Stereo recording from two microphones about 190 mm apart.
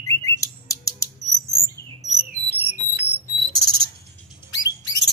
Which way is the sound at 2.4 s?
60° right (ahead or behind).